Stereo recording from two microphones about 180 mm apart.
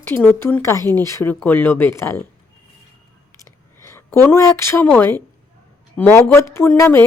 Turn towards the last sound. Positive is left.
turn(degrees=15)  # may be behind; listen again after turning